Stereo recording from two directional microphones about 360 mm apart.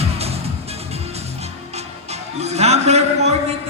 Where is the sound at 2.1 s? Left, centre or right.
Centre.